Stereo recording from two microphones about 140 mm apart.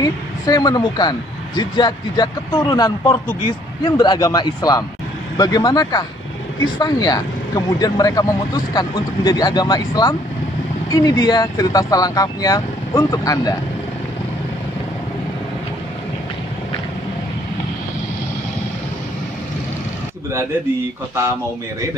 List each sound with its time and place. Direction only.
0.0 s speech: 25° left (ahead or behind)